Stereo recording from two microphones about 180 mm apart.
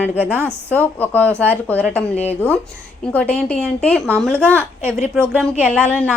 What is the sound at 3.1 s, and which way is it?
Speech, 10° left (ahead or behind).